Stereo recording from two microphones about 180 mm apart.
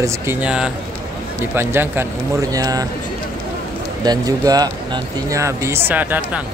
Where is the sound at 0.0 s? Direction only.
10° right (ahead or behind).